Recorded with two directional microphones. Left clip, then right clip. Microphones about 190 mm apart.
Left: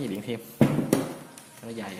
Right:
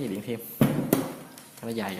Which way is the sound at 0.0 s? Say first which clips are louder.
Even; centre (ahead or behind).